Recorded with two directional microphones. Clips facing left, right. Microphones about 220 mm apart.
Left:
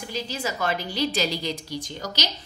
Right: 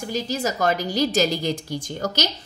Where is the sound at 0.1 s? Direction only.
40° right (ahead or behind).